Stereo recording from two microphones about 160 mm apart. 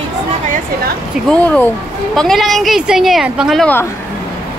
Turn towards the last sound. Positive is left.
turn(degrees=0)  # may be behind; listen again after turning